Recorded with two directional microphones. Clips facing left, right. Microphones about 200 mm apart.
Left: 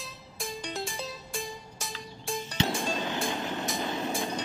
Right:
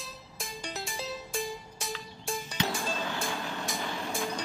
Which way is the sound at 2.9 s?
20° left (ahead or behind).